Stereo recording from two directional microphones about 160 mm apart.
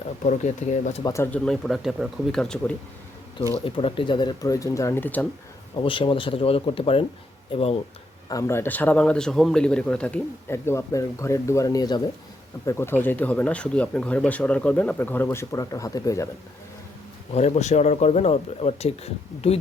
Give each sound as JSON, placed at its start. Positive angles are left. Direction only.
{"t": 0.3, "sound": "speech", "side_deg": 50}
{"t": 1.0, "sound": "a man's voice", "side_deg": 15}
{"t": 1.5, "sound": "speech", "side_deg": 0}
{"t": 3.6, "sound": "speech", "side_deg": 35}
{"t": 5.7, "sound": "speech", "side_deg": 30}
{"t": 8.3, "sound": "a man's voice", "side_deg": 20}
{"t": 17.3, "sound": "speech", "side_deg": 45}